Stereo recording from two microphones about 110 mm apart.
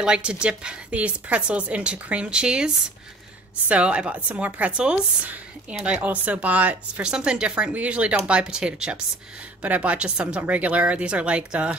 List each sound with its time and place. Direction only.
0.0 s a woman's voice: 10° right (ahead or behind)